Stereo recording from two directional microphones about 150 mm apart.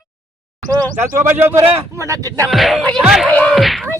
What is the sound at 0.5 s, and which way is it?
Speech, 25° right (ahead or behind).